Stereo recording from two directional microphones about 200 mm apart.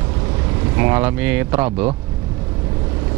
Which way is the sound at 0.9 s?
10° right (ahead or behind).